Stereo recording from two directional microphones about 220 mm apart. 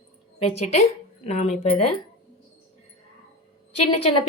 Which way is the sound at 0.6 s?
30° left (ahead or behind).